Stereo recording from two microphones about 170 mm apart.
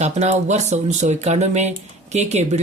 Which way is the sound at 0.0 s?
40° right (ahead or behind).